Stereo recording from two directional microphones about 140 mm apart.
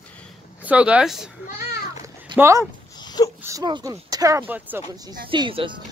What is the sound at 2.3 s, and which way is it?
Speech, 20° right (ahead or behind).